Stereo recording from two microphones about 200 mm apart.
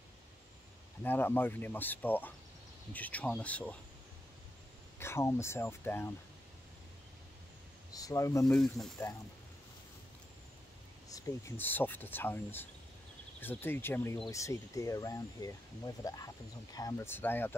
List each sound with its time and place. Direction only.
1.0 s speech: 10° left (ahead or behind)
4.9 s speech: 10° left (ahead or behind)
7.9 s speech: 15° left (ahead or behind)
8.5 s speech: centre (ahead or behind)
11.1 s speech: 15° left (ahead or behind)